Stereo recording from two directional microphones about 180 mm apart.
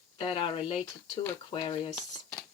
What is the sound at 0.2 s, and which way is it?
Speech, 30° left (ahead or behind).